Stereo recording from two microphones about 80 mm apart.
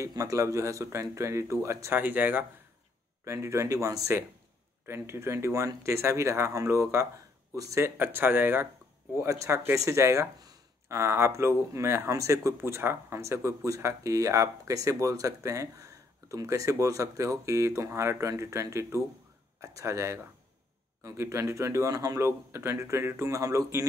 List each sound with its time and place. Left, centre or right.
0.2 s speech: right
2.0 s speech: right
3.3 s speech: right
7.8 s speech: right